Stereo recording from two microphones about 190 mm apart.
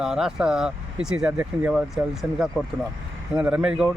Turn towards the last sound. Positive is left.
turn(degrees=-5)  # may be behind; listen again after turning